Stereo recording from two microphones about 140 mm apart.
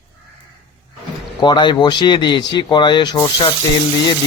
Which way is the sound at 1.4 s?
35° left (ahead or behind).